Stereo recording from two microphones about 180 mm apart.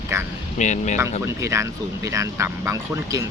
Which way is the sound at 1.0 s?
15° right (ahead or behind).